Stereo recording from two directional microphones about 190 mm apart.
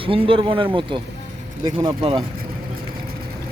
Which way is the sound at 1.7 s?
25° right (ahead or behind).